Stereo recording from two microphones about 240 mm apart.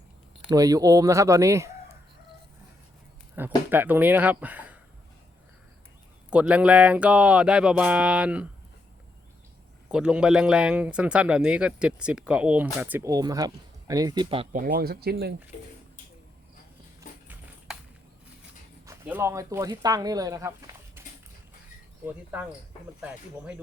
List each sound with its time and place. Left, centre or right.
0.5 s speech: centre
3.3 s speech: centre
6.3 s speech: centre
9.9 s speech: centre; by 14.6 s right
14.6 s speech: right
17.7 s a sound: centre
18.9 s speech: centre
22.0 s speech: centre